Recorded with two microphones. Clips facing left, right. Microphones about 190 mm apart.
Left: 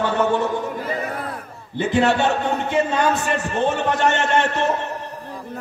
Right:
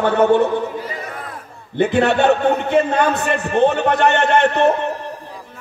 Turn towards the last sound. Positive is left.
turn(degrees=-60)  # may be behind; listen again after turning